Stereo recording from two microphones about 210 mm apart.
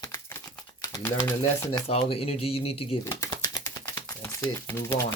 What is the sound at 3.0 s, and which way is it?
Typing, 15° left (ahead or behind).